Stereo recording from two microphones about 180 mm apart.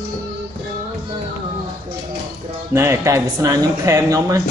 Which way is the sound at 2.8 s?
15° right (ahead or behind).